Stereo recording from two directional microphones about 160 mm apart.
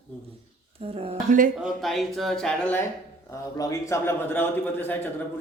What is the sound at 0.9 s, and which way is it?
Speech, 40° right (ahead or behind).